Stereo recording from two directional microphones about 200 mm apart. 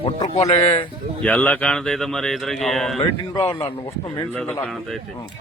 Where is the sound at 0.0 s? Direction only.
30° left (ahead or behind).